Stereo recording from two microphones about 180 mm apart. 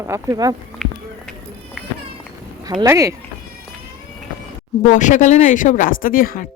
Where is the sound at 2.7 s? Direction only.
20° right (ahead or behind).